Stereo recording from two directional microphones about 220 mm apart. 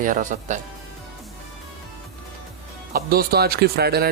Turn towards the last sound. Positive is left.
turn(degrees=-45)  # may be behind; listen again after turning